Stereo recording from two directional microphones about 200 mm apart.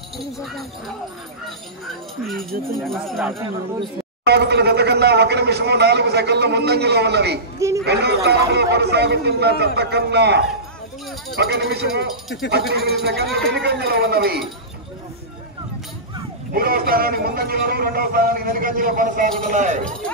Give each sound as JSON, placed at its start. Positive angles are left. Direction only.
{"t": 2.8, "sound": "speech", "side_deg": 0}
{"t": 4.3, "sound": "a man's voice", "side_deg": -55}
{"t": 16.5, "sound": "a man's voice", "side_deg": -50}